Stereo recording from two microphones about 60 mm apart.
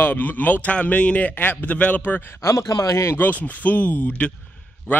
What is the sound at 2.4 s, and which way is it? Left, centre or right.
Speech, left.